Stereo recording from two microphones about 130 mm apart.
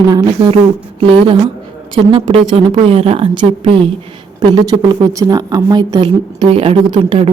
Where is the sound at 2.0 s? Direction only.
45° right (ahead or behind).